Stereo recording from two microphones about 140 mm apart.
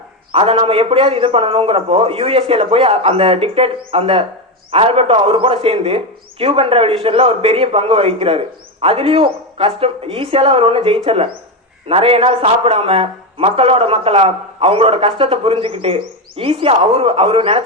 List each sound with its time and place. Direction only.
0.3 s a man's voice: 45° right (ahead or behind)